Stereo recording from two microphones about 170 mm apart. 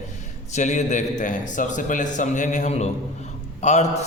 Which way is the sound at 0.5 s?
45° left (ahead or behind).